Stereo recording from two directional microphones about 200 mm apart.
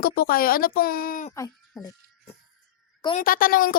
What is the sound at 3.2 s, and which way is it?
Speech, 45° left (ahead or behind).